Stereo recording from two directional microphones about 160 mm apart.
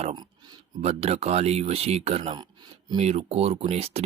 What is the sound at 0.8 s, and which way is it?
Speech, 40° right (ahead or behind).